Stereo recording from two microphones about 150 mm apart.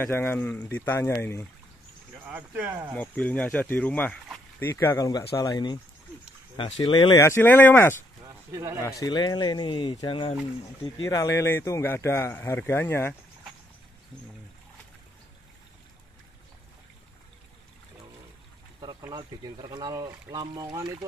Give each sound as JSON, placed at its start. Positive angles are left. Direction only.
{"t": 0.0, "sound": "speech", "side_deg": 15}
{"t": 2.2, "sound": "speech", "side_deg": -10}
{"t": 3.0, "sound": "speech", "side_deg": 10}
{"t": 8.5, "sound": "a man's voice", "side_deg": -20}
{"t": 9.0, "sound": "speech", "side_deg": 30}
{"t": 18.8, "sound": "speech", "side_deg": -25}